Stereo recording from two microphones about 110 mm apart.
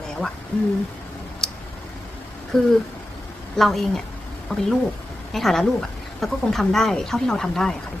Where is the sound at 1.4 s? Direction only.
5° left (ahead or behind).